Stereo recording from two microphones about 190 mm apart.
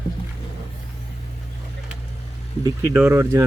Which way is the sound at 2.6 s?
15° right (ahead or behind).